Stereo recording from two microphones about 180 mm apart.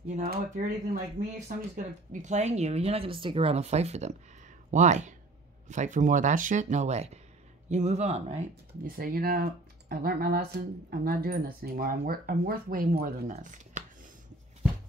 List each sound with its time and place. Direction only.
0.1 s speech: 50° right (ahead or behind)
8.8 s speech: 55° right (ahead or behind)